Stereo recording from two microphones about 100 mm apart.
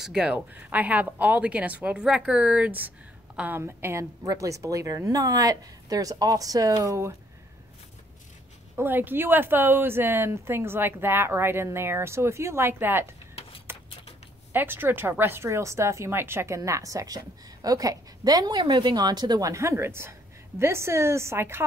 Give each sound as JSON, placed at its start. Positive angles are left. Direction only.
{"t": 0.0, "sound": "a woman's voice", "side_deg": -10}
{"t": 8.7, "sound": "a woman's voice", "side_deg": -20}
{"t": 13.7, "sound": "a sound", "side_deg": -20}
{"t": 14.5, "sound": "a woman's voice", "side_deg": -20}